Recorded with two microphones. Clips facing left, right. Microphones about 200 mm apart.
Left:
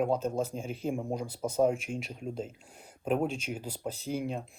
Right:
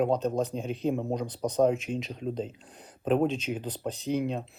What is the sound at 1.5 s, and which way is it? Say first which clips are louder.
Speech: right 3 dB; 10° left (ahead or behind).